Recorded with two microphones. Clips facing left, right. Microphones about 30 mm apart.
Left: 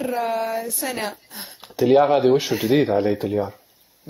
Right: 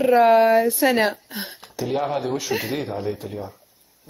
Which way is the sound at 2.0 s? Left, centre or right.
Left.